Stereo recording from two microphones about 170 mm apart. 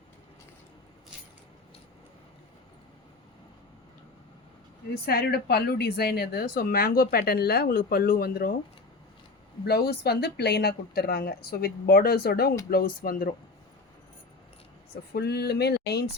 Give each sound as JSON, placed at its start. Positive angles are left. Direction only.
{"t": 5.0, "sound": "a woman's voice", "side_deg": 65}
{"t": 9.6, "sound": "a woman's voice", "side_deg": 65}
{"t": 15.1, "sound": "speech", "side_deg": 70}